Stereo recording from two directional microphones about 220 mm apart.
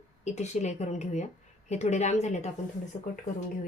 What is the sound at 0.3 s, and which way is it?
Speech, 30° left (ahead or behind).